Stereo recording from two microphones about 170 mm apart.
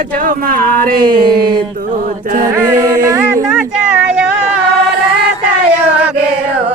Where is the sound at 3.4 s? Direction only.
5° right (ahead or behind).